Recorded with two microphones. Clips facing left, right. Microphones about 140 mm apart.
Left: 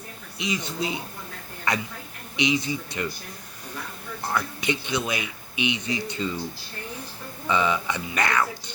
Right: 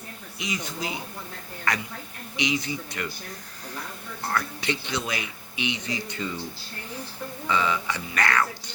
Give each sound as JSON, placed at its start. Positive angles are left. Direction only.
{"t": 0.3, "sound": "speech", "side_deg": 25}
{"t": 4.3, "sound": "speech", "side_deg": 15}
{"t": 7.4, "sound": "speech", "side_deg": 20}